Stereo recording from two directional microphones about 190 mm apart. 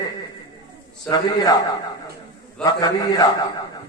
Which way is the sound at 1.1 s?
20° left (ahead or behind).